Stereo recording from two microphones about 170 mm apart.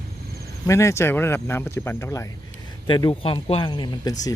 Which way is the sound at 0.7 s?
15° left (ahead or behind).